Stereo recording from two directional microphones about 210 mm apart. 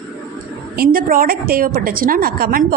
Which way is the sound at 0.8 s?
45° right (ahead or behind).